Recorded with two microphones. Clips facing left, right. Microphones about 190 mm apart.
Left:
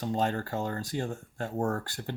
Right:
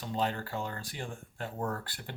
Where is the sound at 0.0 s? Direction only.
45° left (ahead or behind).